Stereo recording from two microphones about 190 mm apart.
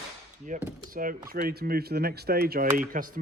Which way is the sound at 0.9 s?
45° right (ahead or behind).